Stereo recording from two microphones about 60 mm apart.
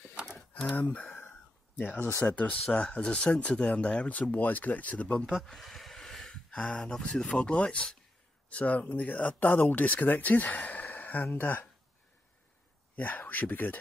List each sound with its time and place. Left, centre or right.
0.1 s a sound: centre
0.5 s speech: left
1.1 s a sound: left
2.1 s speech: left
4.3 s speech: left
5.4 s speech: centre
8.5 s speech: left
12.9 s speech: left